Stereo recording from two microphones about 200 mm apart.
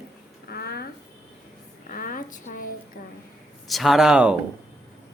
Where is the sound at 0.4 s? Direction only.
50° left (ahead or behind).